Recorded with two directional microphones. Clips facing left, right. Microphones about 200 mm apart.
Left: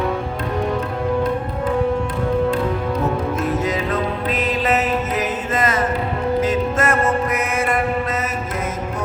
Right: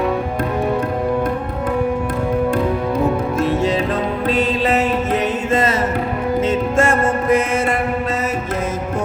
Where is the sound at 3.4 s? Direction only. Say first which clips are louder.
Right 4 dB; 30° right (ahead or behind).